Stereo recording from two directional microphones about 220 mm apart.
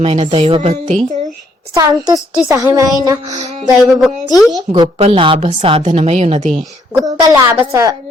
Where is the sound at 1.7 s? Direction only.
15° right (ahead or behind).